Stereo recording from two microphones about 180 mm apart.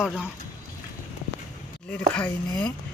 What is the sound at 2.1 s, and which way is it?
Speech, 5° left (ahead or behind).